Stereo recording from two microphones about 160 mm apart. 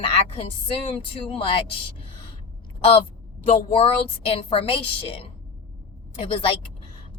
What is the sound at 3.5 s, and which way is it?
A woman's voice, 40° left (ahead or behind).